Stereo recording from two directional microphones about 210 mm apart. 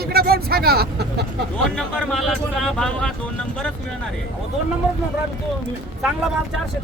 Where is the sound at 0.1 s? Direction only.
45° right (ahead or behind).